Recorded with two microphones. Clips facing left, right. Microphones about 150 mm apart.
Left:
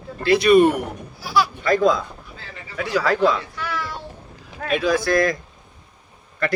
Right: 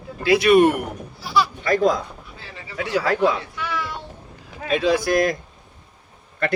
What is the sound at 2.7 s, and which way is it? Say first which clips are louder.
Speech: left 1 dB; 30° right (ahead or behind).